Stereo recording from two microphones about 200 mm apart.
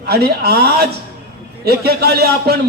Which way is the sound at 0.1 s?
50° right (ahead or behind).